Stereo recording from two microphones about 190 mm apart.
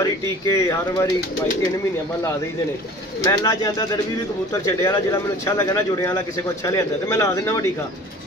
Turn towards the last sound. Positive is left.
turn(degrees=15)  # may be behind; listen again after turning